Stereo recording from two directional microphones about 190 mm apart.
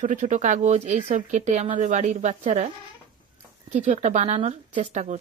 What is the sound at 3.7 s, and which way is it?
Speech, 40° right (ahead or behind).